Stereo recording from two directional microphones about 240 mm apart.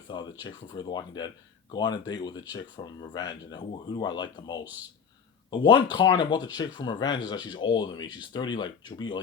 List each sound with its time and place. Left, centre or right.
0.1 s speech: centre